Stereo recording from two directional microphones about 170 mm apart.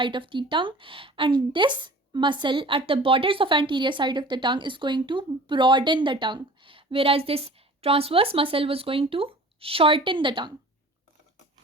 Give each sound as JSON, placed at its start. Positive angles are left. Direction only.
{"t": 0.0, "sound": "speech", "side_deg": -30}